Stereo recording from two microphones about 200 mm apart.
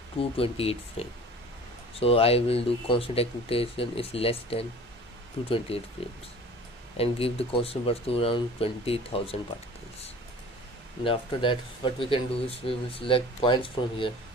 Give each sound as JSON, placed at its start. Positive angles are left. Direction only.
{"t": 0.2, "sound": "speech", "side_deg": 30}
{"t": 5.7, "sound": "speech", "side_deg": 30}
{"t": 7.0, "sound": "speech", "side_deg": 30}
{"t": 11.1, "sound": "speech", "side_deg": 25}